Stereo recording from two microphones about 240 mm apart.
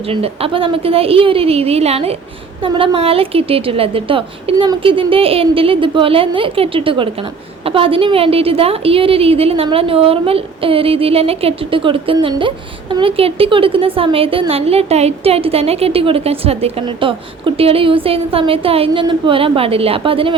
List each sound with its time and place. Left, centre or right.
0.1 s a woman's voice: right